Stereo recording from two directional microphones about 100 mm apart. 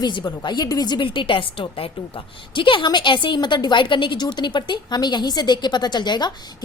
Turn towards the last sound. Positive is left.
turn(degrees=45)  # may be behind; listen again after turning